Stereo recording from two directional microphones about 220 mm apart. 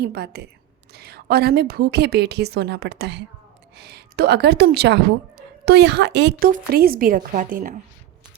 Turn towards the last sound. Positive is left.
turn(degrees=-40)  # may be behind; listen again after turning